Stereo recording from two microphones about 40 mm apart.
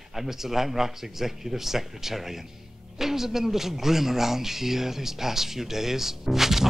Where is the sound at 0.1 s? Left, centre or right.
Centre.